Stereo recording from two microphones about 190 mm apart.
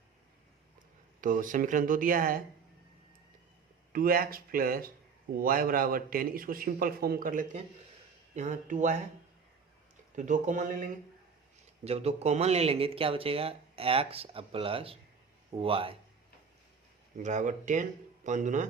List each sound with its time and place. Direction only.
1.2 s a man's voice: 45° right (ahead or behind)
3.9 s a man's voice: 50° right (ahead or behind)
10.2 s a man's voice: 40° right (ahead or behind)
11.9 s speech: 35° right (ahead or behind)
17.2 s speech: 40° right (ahead or behind)